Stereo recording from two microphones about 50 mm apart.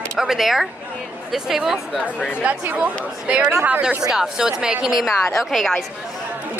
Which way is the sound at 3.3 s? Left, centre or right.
Right.